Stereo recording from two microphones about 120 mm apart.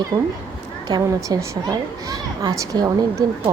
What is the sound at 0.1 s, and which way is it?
Speech, 50° right (ahead or behind).